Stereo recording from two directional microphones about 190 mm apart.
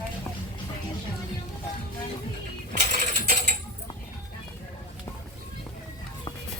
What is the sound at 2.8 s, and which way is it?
Mechanisms, 40° right (ahead or behind).